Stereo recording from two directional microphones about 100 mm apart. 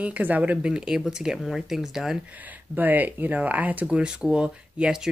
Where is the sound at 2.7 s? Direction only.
20° right (ahead or behind).